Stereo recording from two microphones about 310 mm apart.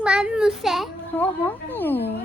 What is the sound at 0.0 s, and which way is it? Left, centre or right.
A child's voice, centre.